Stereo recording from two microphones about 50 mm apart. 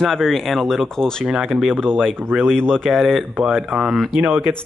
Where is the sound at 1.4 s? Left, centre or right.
Centre.